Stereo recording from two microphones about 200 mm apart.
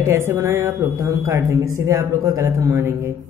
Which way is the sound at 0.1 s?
15° right (ahead or behind).